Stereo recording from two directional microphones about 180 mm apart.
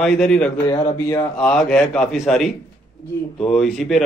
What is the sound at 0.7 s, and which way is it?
Speech, 20° left (ahead or behind).